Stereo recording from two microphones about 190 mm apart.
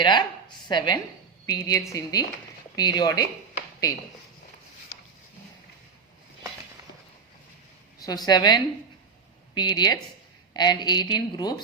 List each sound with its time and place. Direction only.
0.0 s a woman's voice: 25° left (ahead or behind)
7.9 s a woman's voice: 20° left (ahead or behind)